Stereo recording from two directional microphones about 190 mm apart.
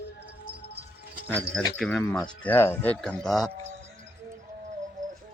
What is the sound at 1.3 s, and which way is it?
Speech, 5° left (ahead or behind).